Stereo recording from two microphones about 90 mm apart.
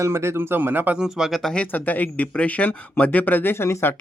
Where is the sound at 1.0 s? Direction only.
Centre (ahead or behind).